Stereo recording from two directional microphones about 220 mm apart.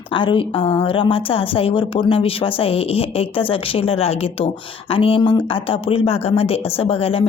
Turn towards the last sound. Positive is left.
turn(degrees=25)  # may be behind; listen again after turning